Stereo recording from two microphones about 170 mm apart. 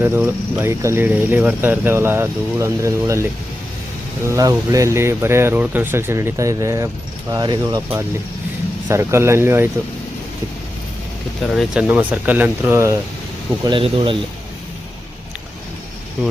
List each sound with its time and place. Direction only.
0.0 s speech: 10° right (ahead or behind)
4.3 s speech: 20° right (ahead or behind)
8.9 s speech: 15° right (ahead or behind)
11.4 s speech: 5° right (ahead or behind)
13.7 s speech: 30° right (ahead or behind)